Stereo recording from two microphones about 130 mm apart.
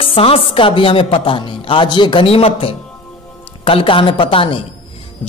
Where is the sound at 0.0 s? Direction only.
45° left (ahead or behind).